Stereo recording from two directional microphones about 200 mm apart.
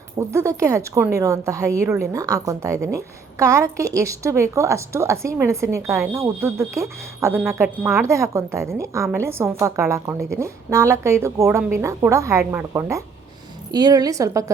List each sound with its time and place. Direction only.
0.2 s a woman's voice: 15° right (ahead or behind)